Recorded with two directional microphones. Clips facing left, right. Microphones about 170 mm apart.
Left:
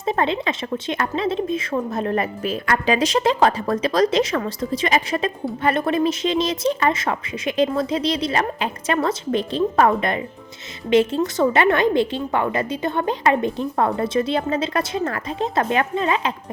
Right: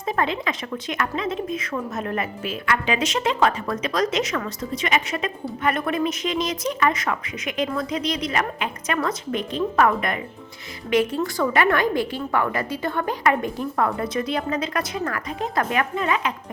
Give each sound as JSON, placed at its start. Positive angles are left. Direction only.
{"t": 0.0, "sound": "a woman's voice", "side_deg": 25}